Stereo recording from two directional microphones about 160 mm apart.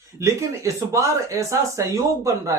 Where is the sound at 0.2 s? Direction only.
20° right (ahead or behind).